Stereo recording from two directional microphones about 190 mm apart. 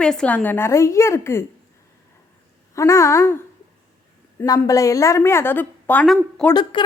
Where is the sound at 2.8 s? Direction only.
15° left (ahead or behind).